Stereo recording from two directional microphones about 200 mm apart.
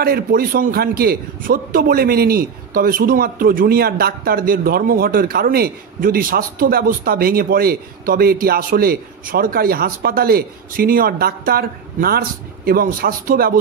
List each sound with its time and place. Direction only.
0.0 s a man's voice: 50° right (ahead or behind)